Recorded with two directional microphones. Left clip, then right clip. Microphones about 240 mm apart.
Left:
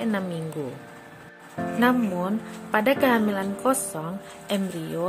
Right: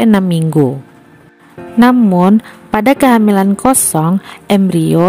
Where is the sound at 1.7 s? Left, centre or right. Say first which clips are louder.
Right 13 dB; right.